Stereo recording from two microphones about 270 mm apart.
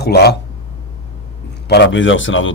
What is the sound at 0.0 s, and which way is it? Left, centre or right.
Speech, left.